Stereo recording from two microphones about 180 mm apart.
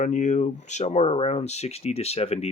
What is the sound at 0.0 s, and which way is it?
Speech, 40° left (ahead or behind).